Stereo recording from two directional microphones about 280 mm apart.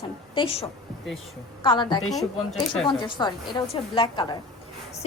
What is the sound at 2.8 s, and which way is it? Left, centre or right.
A woman's voice, centre.